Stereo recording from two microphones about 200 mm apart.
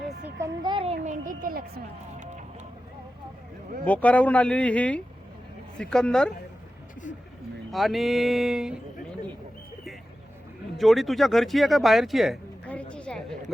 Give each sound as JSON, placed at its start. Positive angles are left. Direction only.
{"t": 0.3, "sound": "a child's voice", "side_deg": -20}
{"t": 1.0, "sound": "a woman's voice", "side_deg": -40}
{"t": 3.8, "sound": "speech", "side_deg": 5}
{"t": 7.7, "sound": "speech", "side_deg": 0}
{"t": 10.8, "sound": "speech", "side_deg": 0}